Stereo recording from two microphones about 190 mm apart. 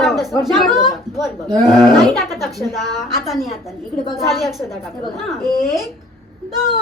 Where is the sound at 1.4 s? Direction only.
20° right (ahead or behind).